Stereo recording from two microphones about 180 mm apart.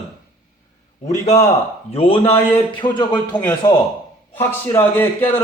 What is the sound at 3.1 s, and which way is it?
A man's voice, 10° left (ahead or behind).